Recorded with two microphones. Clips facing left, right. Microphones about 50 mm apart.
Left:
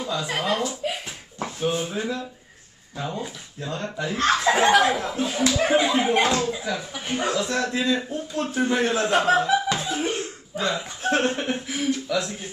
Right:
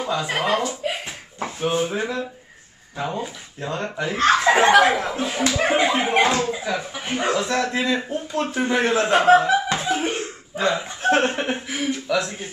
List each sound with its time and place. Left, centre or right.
0.0 s speech: right
0.4 s a sound: right
1.7 s speech: right
3.1 s speech: right
3.7 s speech: right
6.2 s speech: right
6.5 s speech: right
6.8 s speech: right
9.8 s cough: right
11.0 s speech: right